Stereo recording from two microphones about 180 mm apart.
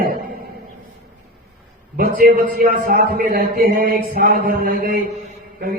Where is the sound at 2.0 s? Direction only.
55° right (ahead or behind).